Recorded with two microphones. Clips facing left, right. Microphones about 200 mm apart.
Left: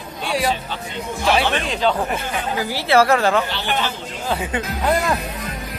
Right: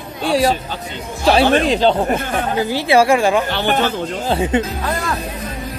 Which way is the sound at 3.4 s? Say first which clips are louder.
Right 6 dB; 50° right (ahead or behind).